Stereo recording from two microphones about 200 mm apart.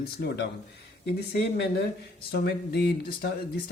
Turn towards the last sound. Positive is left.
turn(degrees=55)  # may be behind; listen again after turning